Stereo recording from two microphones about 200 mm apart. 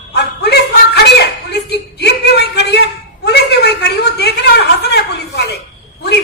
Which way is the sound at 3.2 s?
55° left (ahead or behind).